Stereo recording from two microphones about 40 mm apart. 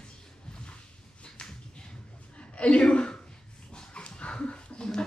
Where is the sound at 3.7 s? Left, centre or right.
Left.